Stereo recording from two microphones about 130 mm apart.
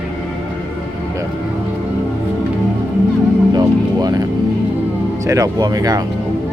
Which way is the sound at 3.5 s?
30° right (ahead or behind).